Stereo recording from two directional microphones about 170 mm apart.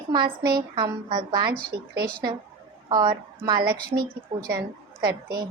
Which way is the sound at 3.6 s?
60° right (ahead or behind).